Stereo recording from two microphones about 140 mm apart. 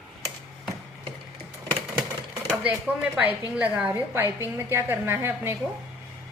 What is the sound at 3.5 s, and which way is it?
A woman's voice, 10° right (ahead or behind).